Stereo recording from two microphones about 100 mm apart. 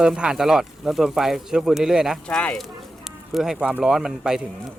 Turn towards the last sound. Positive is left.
turn(degrees=-5)  # may be behind; listen again after turning